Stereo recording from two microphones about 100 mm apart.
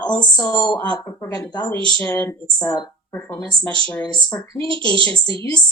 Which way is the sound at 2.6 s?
45° left (ahead or behind).